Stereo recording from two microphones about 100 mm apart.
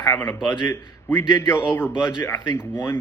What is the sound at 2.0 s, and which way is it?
Speech, 25° left (ahead or behind).